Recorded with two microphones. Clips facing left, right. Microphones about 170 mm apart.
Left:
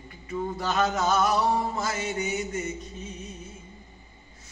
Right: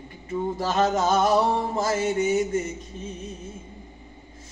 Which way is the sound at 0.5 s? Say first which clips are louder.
Right 3 dB; 35° right (ahead or behind).